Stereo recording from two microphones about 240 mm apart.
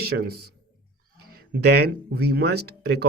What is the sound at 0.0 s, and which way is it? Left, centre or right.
Speech, right.